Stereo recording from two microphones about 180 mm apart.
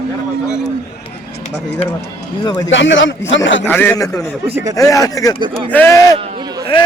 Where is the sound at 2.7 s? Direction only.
90° left.